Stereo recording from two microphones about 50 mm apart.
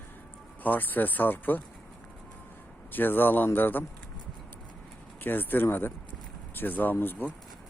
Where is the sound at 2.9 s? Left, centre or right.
Left.